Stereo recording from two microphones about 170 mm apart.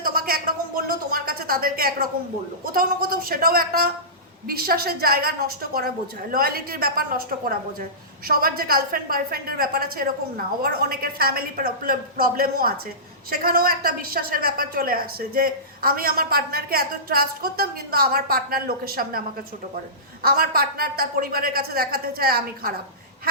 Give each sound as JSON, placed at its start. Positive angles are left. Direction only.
{"t": 0.0, "sound": "a sound", "side_deg": -60}
{"t": 2.7, "sound": "a woman's voice", "side_deg": -60}
{"t": 6.3, "sound": "a woman's voice", "side_deg": -60}
{"t": 20.2, "sound": "a woman's voice", "side_deg": -60}